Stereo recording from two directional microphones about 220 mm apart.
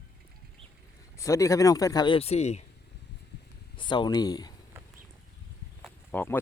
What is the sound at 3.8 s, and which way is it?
Speech, 20° left (ahead or behind).